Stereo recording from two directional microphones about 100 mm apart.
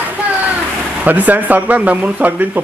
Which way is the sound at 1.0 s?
15° right (ahead or behind).